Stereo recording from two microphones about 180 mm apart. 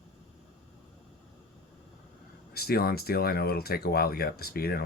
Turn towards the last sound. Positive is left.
turn(degrees=60)  # may be behind; listen again after turning